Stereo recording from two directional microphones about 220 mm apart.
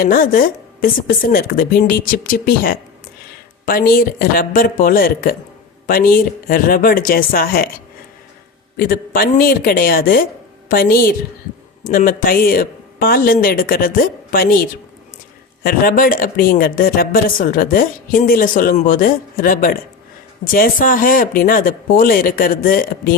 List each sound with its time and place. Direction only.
0.0 s speech: 40° left (ahead or behind)
8.9 s a woman's voice: 45° left (ahead or behind)